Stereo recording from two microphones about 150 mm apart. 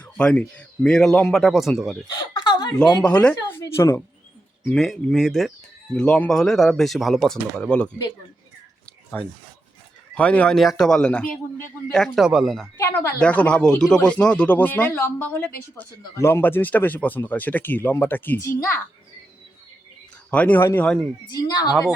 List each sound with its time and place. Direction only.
0.0 s a man's voice: 10° left (ahead or behind)
2.0 s speech: 25° left (ahead or behind)
2.7 s speech: 5° left (ahead or behind)
3.6 s a woman's voice: 20° left (ahead or behind)
4.6 s a man's voice: 5° left (ahead or behind)
9.2 s a man's voice: 10° left (ahead or behind)
12.7 s speech: 20° left (ahead or behind)
20.3 s speech: 10° left (ahead or behind)
21.2 s speech: 25° left (ahead or behind)